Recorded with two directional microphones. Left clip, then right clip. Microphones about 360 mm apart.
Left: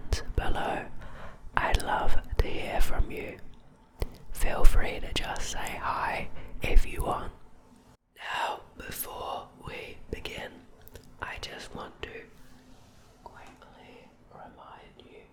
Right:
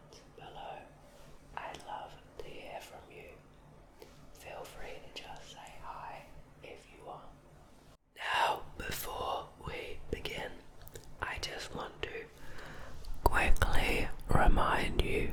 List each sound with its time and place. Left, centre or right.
0.3 s whispering: left
8.2 s whispering: centre
13.2 s whispering: right